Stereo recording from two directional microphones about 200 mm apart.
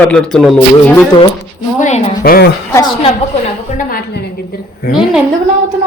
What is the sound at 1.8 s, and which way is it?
Speech, 45° left (ahead or behind).